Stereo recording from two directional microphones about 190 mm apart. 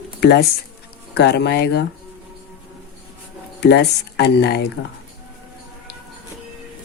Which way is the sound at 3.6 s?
60° left (ahead or behind).